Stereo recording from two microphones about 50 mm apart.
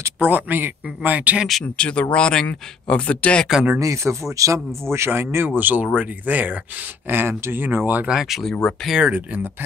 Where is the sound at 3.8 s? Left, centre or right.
Right.